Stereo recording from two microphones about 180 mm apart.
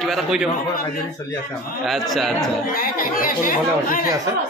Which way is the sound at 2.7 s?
50° left (ahead or behind).